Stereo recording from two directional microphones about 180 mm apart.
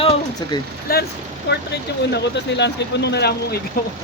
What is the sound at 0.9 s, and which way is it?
Speech, 55° left (ahead or behind).